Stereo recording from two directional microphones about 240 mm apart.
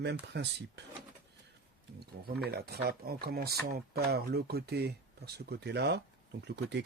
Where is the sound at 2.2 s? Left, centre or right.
Right.